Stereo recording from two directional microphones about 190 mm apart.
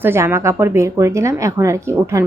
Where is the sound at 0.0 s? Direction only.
10° right (ahead or behind).